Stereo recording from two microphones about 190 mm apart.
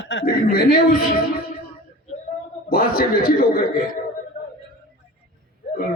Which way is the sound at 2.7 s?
50° left (ahead or behind).